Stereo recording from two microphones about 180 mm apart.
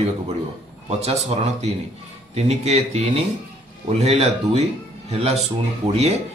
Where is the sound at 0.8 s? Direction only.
35° right (ahead or behind).